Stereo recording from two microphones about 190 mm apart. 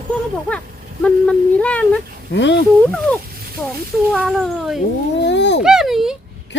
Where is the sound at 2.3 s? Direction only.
70° left (ahead or behind).